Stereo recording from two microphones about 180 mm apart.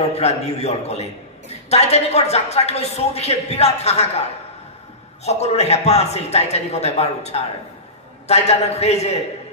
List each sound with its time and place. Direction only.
0.1 s a woman's voice: 35° left (ahead or behind)